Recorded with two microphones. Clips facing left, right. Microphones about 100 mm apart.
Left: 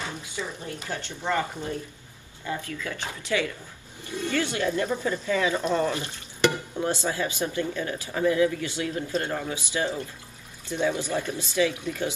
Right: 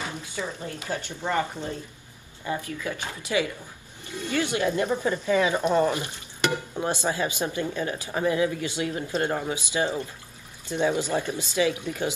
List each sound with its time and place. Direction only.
0.4 s speech: 15° right (ahead or behind)
2.4 s speech: 20° right (ahead or behind)